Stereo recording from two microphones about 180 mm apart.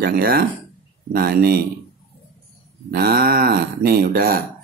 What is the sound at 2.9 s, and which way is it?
Speech, 60° right (ahead or behind).